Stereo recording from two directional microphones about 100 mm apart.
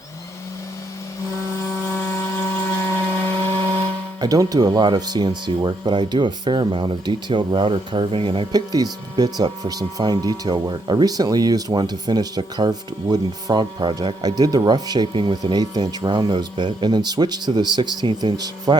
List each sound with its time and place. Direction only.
2.1 s a sound: 25° left (ahead or behind)
4.2 s speech: 40° right (ahead or behind); by 8.4 s 60° right (ahead or behind)
8.5 s speech: 40° right (ahead or behind)